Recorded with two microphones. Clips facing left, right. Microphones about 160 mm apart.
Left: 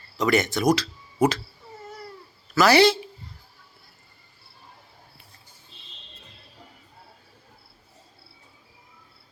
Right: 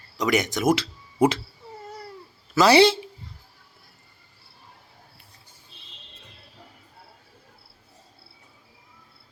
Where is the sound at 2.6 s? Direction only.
25° right (ahead or behind).